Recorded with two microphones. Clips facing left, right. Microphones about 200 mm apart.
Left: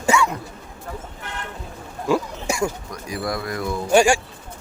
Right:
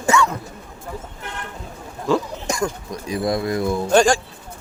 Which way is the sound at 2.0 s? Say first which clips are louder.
Right 1 dB; 10° left (ahead or behind).